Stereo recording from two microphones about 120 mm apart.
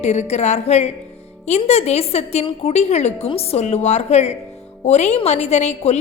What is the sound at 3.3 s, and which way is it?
A woman's voice, 55° left (ahead or behind).